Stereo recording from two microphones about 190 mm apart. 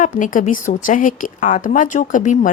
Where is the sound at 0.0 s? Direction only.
45° left (ahead or behind).